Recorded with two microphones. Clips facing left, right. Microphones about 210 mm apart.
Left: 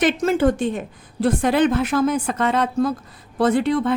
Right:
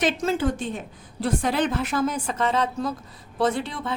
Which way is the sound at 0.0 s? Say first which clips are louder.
Left 6 dB; 55° left (ahead or behind).